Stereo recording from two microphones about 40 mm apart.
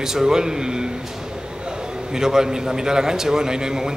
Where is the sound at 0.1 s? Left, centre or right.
Centre.